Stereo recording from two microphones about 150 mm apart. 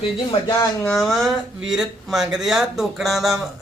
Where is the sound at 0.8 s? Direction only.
5° left (ahead or behind).